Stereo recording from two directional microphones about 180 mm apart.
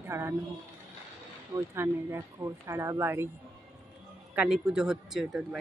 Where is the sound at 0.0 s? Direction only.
15° right (ahead or behind).